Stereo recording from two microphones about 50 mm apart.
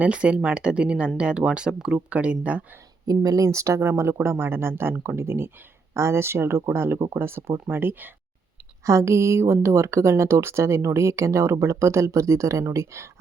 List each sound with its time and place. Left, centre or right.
0.0 s speech: right
2.0 s speech: right
3.4 s speech: right
5.9 s speech: right
7.8 s speech: right
8.9 s speech: right
12.7 s speech: right